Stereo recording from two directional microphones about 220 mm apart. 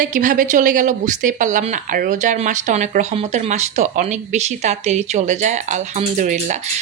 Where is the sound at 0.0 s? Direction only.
35° right (ahead or behind).